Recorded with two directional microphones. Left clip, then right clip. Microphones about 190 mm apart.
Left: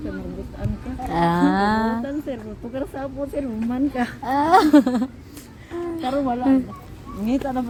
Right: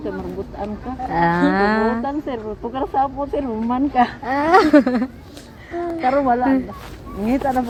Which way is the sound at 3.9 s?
40° left (ahead or behind).